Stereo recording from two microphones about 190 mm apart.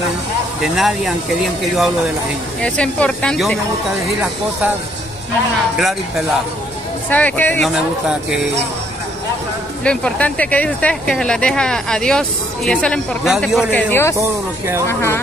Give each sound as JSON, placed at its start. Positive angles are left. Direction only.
{"t": 0.6, "sound": "speech", "side_deg": 0}
{"t": 5.8, "sound": "speech", "side_deg": 0}
{"t": 9.8, "sound": "speech", "side_deg": 5}
{"t": 14.1, "sound": "speech", "side_deg": -15}
{"t": 14.9, "sound": "speech", "side_deg": 15}